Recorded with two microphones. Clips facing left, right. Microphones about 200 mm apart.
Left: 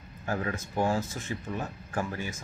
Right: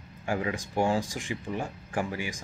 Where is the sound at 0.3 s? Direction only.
15° right (ahead or behind).